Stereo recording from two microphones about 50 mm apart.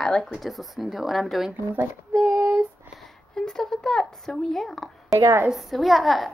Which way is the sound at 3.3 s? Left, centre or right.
Centre.